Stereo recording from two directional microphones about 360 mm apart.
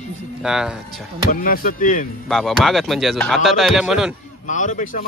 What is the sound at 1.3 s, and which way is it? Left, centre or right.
Speech, left.